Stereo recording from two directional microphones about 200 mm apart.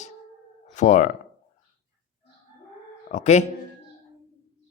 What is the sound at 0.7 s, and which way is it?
Speech, 35° left (ahead or behind).